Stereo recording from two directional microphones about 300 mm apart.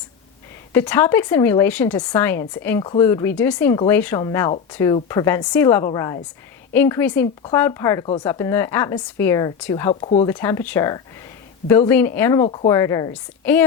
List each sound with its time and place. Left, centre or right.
0.7 s speech: centre
9.9 s speech: centre
10.3 s a woman's voice: centre